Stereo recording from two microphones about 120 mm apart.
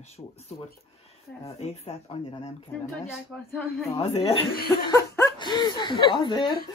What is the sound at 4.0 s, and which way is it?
Speech, 55° left (ahead or behind).